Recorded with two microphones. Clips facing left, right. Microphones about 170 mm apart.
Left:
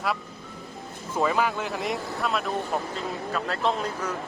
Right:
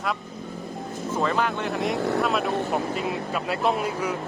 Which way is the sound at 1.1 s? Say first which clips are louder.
Even; 5° left (ahead or behind).